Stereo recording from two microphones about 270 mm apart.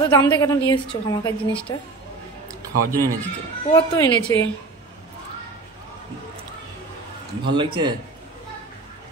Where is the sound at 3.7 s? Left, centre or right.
Centre.